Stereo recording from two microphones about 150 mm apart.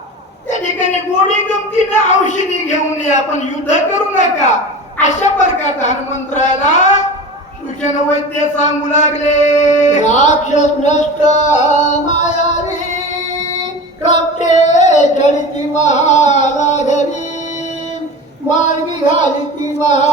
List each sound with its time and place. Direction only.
0.5 s a sound: 50° left (ahead or behind)
1.5 s speech: 50° left (ahead or behind)
14.0 s female singing: 50° left (ahead or behind)
15.7 s singing: 50° left (ahead or behind)
18.4 s speech: 55° left (ahead or behind)
19.8 s speech: 50° left (ahead or behind)